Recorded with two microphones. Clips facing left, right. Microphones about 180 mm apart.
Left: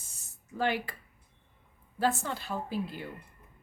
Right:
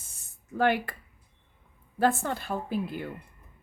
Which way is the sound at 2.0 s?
55° right (ahead or behind).